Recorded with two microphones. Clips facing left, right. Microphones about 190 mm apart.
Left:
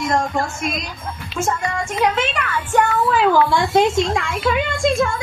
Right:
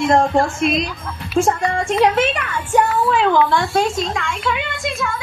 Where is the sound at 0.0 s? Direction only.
35° right (ahead or behind).